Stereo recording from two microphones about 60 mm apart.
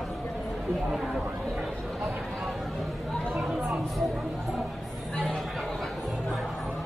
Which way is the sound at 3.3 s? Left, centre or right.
Centre.